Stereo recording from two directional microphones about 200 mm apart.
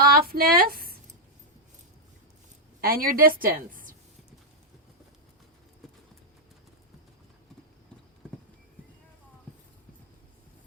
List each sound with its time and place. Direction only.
0.0 s speech: 50° right (ahead or behind)
2.8 s a woman's voice: 45° right (ahead or behind)